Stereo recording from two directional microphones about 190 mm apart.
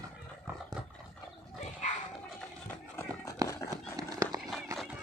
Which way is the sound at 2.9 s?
15° left (ahead or behind).